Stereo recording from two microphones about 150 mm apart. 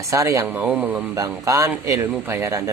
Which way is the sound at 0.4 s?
10° right (ahead or behind).